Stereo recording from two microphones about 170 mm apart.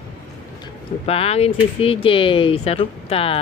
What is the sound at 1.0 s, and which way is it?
Speech, 35° left (ahead or behind).